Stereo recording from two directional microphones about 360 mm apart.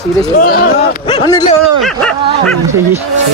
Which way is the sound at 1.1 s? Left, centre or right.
Centre.